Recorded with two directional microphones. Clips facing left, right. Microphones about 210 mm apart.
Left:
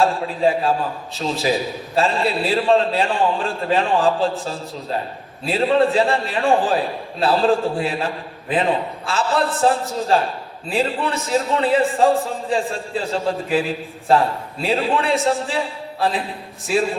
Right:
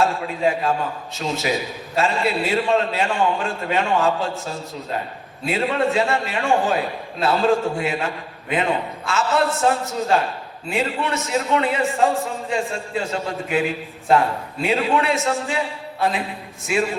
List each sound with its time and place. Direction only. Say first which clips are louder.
0.0 s a man's voice: left 2 dB; 30° left (ahead or behind)
5.5 s a man's voice: left 4 dB; 30° left (ahead or behind)
16.0 s music: left 1 dB; 30° left (ahead or behind)
16.7 s a man's voice: left 2 dB; 30° left (ahead or behind)